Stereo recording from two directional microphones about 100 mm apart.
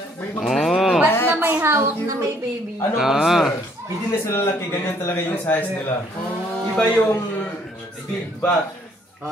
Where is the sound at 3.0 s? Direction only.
5° right (ahead or behind).